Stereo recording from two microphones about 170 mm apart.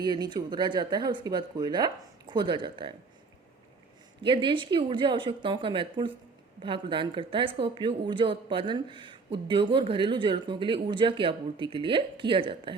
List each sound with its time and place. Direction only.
0.0 s a woman's voice: 25° right (ahead or behind)
4.2 s a woman's voice: 30° right (ahead or behind)